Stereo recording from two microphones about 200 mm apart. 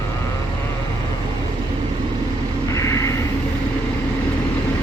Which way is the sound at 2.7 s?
15° left (ahead or behind).